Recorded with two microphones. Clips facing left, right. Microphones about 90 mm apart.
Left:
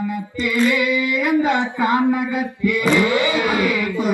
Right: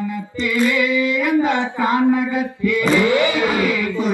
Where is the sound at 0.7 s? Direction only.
20° left (ahead or behind).